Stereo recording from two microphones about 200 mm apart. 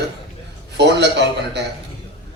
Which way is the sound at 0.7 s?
60° right (ahead or behind).